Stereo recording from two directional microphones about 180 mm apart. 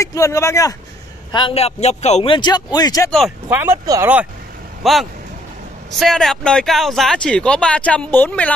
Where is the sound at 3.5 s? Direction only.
10° right (ahead or behind).